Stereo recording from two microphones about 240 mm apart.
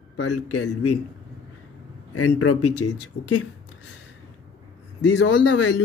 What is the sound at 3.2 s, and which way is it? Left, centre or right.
Speech, left.